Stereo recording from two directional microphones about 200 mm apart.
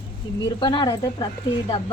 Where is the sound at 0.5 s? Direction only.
25° left (ahead or behind).